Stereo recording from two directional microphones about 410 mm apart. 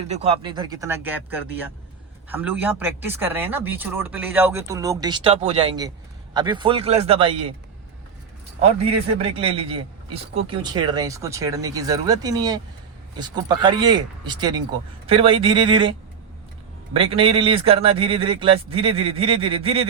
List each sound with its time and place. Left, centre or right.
0.1 s a man's voice: centre
9.4 s a man's voice: centre